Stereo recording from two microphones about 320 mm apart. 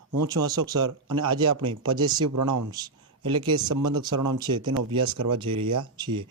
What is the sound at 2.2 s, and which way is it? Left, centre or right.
Speech, right.